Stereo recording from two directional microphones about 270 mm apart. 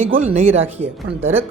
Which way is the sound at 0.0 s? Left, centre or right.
Right.